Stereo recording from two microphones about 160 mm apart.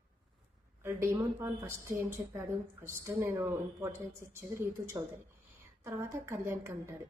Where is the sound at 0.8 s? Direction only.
15° right (ahead or behind).